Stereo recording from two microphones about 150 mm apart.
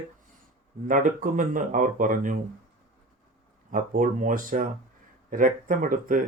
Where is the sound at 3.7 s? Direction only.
60° right (ahead or behind).